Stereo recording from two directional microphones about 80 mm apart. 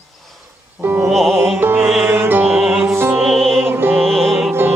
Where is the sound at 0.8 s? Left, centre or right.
Right.